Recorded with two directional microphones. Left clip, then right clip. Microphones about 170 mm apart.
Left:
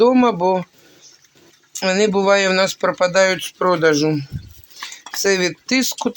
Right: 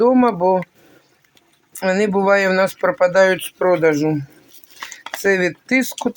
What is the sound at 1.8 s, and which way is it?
Speech, 15° right (ahead or behind).